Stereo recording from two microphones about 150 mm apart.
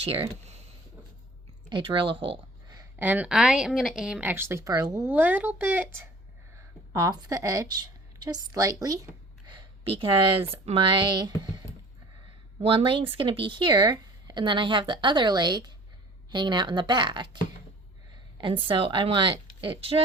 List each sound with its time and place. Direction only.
0.0 s speech: 40° right (ahead or behind)
1.7 s speech: 35° right (ahead or behind)
2.9 s speech: 10° right (ahead or behind)
5.0 s speech: 10° right (ahead or behind)
6.9 s a woman's voice: 25° right (ahead or behind)
9.5 s a sound: 35° right (ahead or behind)
10.5 s speech: 40° right (ahead or behind)
12.6 s speech: 35° right (ahead or behind)
18.3 s speech: 35° right (ahead or behind)